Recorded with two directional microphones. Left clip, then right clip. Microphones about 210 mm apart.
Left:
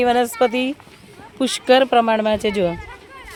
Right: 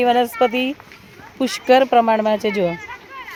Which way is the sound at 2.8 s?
35° left (ahead or behind).